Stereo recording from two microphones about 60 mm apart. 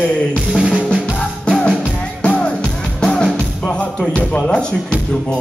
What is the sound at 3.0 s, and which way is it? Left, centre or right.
Speech, centre.